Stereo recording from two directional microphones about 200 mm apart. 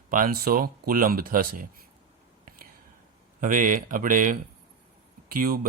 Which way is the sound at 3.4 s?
40° right (ahead or behind).